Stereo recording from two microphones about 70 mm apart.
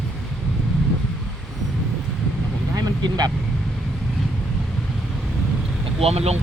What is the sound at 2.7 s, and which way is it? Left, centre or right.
Vehicle, right.